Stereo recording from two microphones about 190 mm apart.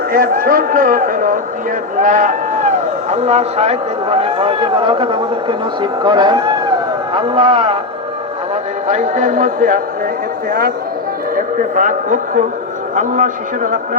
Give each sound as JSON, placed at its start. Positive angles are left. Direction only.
{"t": 0.1, "sound": "a man's voice", "side_deg": -50}
{"t": 8.9, "sound": "a man's voice", "side_deg": -40}
{"t": 11.3, "sound": "a man's voice", "side_deg": -45}